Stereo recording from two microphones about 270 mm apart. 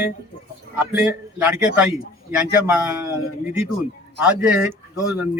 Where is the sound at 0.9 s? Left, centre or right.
Centre.